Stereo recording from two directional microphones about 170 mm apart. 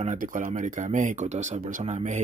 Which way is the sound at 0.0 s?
50° right (ahead or behind).